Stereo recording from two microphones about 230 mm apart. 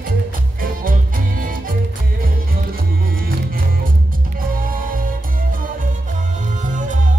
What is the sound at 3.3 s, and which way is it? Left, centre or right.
Music, right.